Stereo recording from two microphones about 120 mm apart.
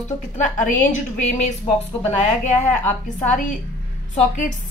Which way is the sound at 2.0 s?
80° left.